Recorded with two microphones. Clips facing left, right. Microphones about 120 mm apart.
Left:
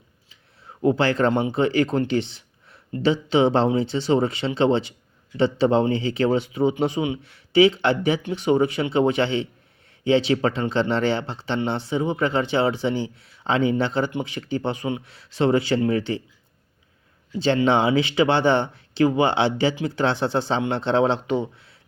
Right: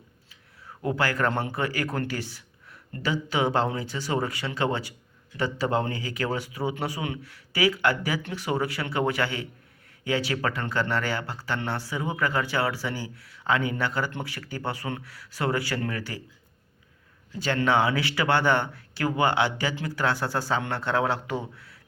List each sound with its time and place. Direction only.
0.6 s speech: 25° left (ahead or behind)
17.3 s speech: 25° left (ahead or behind)